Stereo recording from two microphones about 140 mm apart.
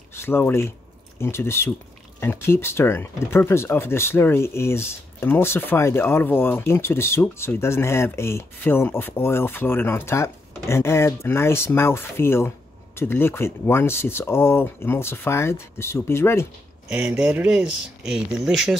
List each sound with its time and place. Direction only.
0.1 s speech: 15° left (ahead or behind)
16.9 s speech: 10° right (ahead or behind)